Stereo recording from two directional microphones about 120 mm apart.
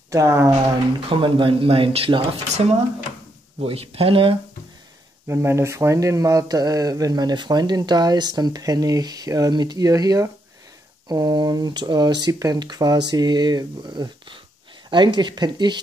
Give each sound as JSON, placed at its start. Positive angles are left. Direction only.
{"t": 0.1, "sound": "speech", "side_deg": -25}
{"t": 1.1, "sound": "speech", "side_deg": -45}
{"t": 5.3, "sound": "speech", "side_deg": -20}